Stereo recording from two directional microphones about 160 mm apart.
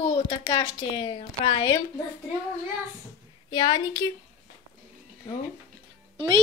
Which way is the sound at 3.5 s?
25° left (ahead or behind).